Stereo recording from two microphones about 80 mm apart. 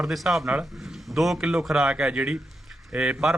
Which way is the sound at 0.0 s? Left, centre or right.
Centre.